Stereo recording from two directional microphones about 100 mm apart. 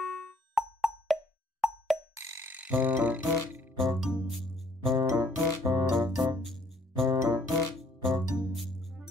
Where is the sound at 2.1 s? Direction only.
25° right (ahead or behind).